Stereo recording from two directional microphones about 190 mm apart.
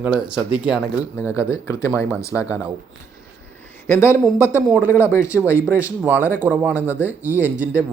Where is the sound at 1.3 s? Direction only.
15° left (ahead or behind).